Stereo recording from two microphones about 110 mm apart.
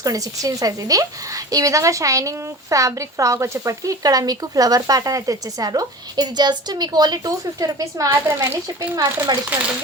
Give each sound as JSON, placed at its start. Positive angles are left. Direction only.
{"t": 0.0, "sound": "a woman's voice", "side_deg": -30}
{"t": 9.5, "sound": "speech", "side_deg": -15}